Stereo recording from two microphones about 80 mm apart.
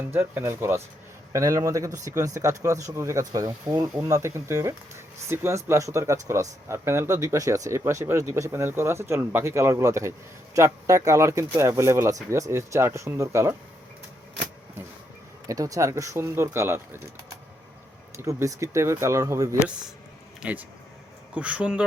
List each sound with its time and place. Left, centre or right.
0.0 s speech: right
15.4 s speech: right
18.3 s speech: right
20.4 s speech: centre